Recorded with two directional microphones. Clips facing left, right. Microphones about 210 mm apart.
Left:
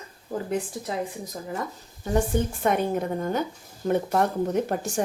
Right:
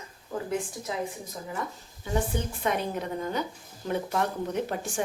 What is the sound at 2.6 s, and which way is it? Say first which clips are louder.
A woman's voice: left 4 dB; 50° left (ahead or behind).